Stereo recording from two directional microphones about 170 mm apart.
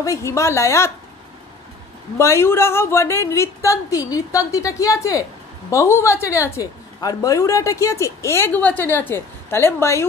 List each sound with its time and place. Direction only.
0.0 s a woman's voice: 20° left (ahead or behind)
2.1 s a woman's voice: 15° left (ahead or behind)